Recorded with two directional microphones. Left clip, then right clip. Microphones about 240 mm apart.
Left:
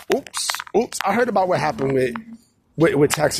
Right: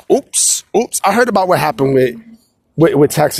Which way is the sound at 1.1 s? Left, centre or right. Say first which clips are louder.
Right 7 dB; right.